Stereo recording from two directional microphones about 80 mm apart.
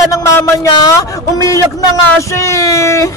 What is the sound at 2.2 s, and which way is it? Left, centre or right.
Speech, left.